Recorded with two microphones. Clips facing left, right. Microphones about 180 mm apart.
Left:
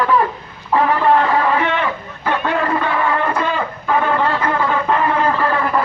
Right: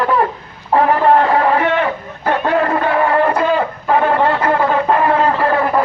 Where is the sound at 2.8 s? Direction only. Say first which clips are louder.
Right 5 dB; 45° right (ahead or behind).